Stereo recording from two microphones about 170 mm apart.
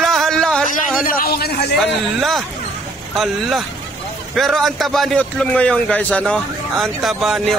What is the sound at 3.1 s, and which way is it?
A man's voice, centre (ahead or behind).